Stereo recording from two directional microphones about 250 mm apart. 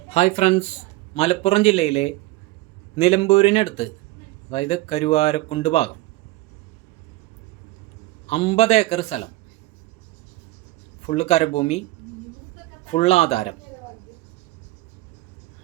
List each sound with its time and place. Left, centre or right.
0.1 s a man's voice: left
8.3 s a man's voice: left
11.0 s a man's voice: left
12.9 s a man's voice: left